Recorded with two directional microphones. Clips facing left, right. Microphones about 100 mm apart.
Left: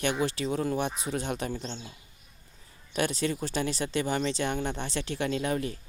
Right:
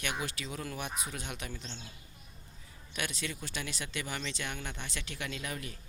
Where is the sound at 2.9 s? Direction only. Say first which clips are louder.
Left 10 dB; 35° left (ahead or behind).